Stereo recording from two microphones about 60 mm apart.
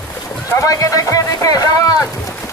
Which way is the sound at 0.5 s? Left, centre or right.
Left.